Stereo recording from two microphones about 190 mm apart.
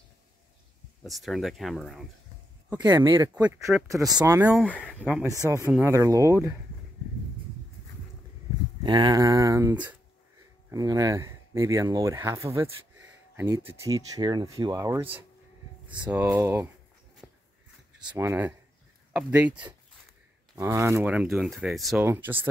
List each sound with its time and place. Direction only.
1.0 s speech: centre (ahead or behind)
2.7 s speech: 20° right (ahead or behind)
4.4 s speech: 10° right (ahead or behind)
4.6 s speech: 5° left (ahead or behind)
5.0 s speech: 10° right (ahead or behind)
8.8 s speech: 20° right (ahead or behind)
13.7 s speech: 20° right (ahead or behind)
17.2 s a sound: 5° left (ahead or behind)
18.1 s speech: 10° right (ahead or behind)